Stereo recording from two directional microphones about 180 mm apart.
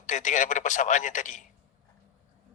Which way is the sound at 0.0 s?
45° left (ahead or behind).